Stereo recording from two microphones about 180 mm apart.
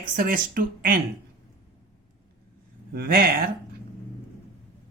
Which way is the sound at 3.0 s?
55° right (ahead or behind).